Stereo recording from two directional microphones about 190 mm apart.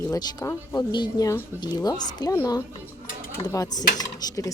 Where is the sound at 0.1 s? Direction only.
20° left (ahead or behind).